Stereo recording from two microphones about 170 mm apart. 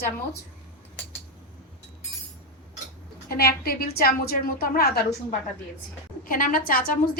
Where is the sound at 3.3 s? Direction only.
65° left (ahead or behind).